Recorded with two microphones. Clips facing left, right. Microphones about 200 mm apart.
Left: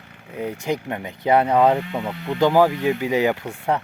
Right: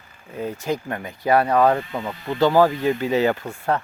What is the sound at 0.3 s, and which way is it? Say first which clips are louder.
Speech: left 1 dB; 15° left (ahead or behind).